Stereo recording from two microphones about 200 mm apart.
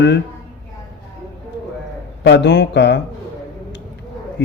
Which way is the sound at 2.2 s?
60° left (ahead or behind).